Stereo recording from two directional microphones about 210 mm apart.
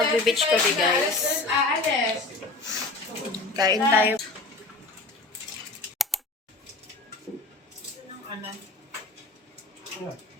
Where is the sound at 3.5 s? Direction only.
20° right (ahead or behind).